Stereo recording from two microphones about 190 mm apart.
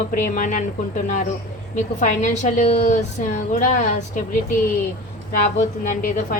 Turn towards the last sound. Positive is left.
turn(degrees=45)  # may be behind; listen again after turning